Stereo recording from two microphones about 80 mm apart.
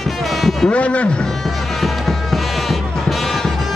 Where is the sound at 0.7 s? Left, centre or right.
Centre.